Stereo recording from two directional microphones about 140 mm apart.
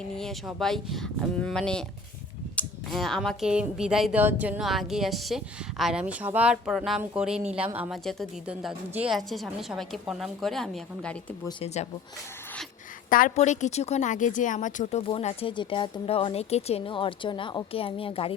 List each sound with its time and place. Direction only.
0.2 s a woman's voice: 5° left (ahead or behind)
2.6 s cap gun: 10° left (ahead or behind)
2.9 s a woman's voice: centre (ahead or behind)
9.1 s a woman's voice: centre (ahead or behind)
11.6 s speech: 55° left (ahead or behind)
13.1 s speech: 75° left (ahead or behind); by 18.3 s 40° left (ahead or behind)